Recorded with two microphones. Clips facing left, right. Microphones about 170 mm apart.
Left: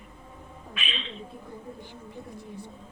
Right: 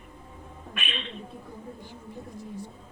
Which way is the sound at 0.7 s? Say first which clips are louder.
Right 1 dB; 55° right (ahead or behind).